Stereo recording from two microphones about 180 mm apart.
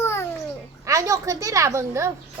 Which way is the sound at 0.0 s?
15° left (ahead or behind).